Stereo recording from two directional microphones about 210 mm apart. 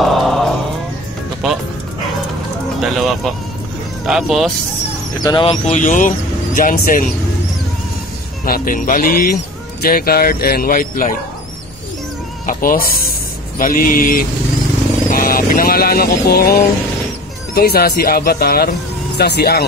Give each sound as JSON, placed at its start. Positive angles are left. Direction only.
{"t": 0.0, "sound": "chant", "side_deg": 0}
{"t": 1.4, "sound": "music", "side_deg": 0}
{"t": 2.8, "sound": "speech", "side_deg": 0}
{"t": 5.2, "sound": "speech", "side_deg": 20}
{"t": 5.8, "sound": "speech", "side_deg": 40}
{"t": 8.5, "sound": "speech", "side_deg": 45}
{"t": 12.4, "sound": "speech", "side_deg": 40}
{"t": 13.6, "sound": "a sound", "side_deg": 40}
{"t": 15.0, "sound": "speech", "side_deg": 45}
{"t": 17.6, "sound": "speech", "side_deg": 45}